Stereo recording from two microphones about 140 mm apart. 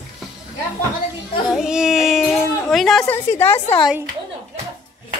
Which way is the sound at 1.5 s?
5° right (ahead or behind).